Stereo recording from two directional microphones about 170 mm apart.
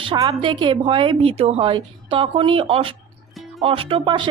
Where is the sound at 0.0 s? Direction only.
30° right (ahead or behind).